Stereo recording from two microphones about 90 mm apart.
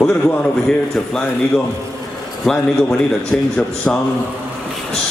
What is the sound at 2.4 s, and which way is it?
A man's voice, 5° left (ahead or behind).